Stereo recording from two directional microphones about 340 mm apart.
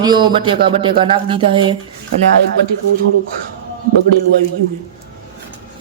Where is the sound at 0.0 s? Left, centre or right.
Centre.